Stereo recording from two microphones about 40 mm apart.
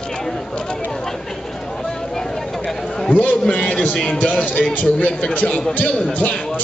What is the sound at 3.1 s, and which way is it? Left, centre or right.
Speech, left.